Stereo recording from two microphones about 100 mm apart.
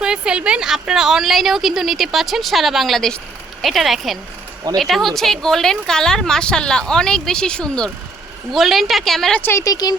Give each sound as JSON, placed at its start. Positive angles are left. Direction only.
{"t": 0.0, "sound": "a woman's voice", "side_deg": -10}
{"t": 9.4, "sound": "speech", "side_deg": 25}
{"t": 9.6, "sound": "speech", "side_deg": 40}